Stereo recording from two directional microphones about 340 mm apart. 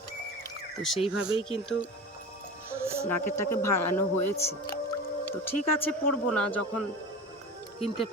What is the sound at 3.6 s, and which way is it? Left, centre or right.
Speech, left.